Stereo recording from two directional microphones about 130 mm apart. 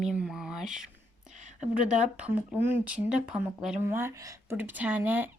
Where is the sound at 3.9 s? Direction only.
20° right (ahead or behind).